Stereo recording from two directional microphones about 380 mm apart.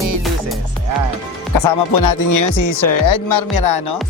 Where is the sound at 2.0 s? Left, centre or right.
Left.